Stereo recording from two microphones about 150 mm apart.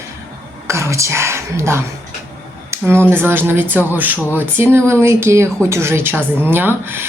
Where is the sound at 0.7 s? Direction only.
20° right (ahead or behind).